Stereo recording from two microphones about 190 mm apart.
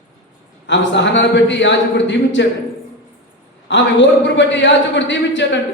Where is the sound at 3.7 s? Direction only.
70° left (ahead or behind).